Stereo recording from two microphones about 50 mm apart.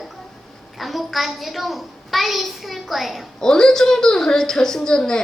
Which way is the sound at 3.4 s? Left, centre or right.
Centre.